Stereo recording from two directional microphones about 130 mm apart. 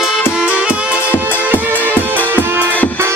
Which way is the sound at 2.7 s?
10° left (ahead or behind).